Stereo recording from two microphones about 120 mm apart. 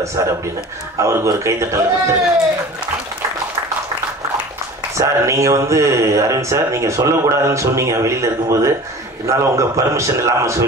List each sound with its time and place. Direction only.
0.0 s speech: 25° right (ahead or behind)
4.9 s speech: 25° right (ahead or behind)